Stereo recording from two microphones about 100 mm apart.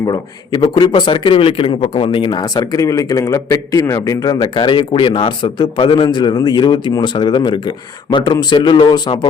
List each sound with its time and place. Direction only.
0.0 s a man's voice: 40° left (ahead or behind)